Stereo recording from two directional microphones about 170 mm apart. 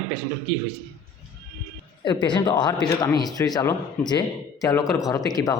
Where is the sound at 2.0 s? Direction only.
25° left (ahead or behind).